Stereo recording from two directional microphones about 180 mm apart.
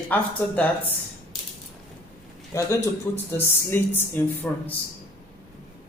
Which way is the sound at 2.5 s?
15° left (ahead or behind).